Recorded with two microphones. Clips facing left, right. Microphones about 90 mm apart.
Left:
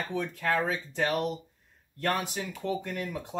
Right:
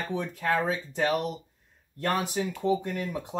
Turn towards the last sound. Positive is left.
turn(degrees=-25)  # may be behind; listen again after turning